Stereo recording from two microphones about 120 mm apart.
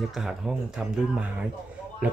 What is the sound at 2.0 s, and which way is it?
Speech, 15° right (ahead or behind).